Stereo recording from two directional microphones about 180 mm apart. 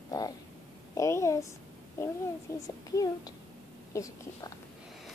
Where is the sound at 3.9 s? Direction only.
15° left (ahead or behind).